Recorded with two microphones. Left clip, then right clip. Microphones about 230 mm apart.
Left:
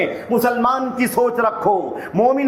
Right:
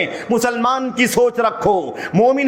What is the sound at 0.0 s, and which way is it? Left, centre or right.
A man's voice, right.